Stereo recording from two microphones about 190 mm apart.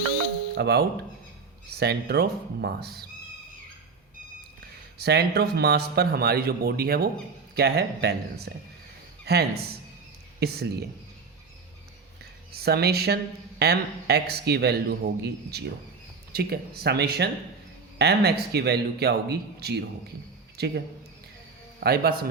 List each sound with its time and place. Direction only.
0.5 s a man's voice: 60° right (ahead or behind)
4.9 s a man's voice: 60° right (ahead or behind)
12.5 s a man's voice: 55° right (ahead or behind)
21.8 s a man's voice: 55° right (ahead or behind)